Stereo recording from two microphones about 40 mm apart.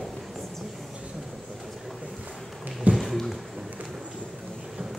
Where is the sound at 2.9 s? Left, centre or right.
Centre.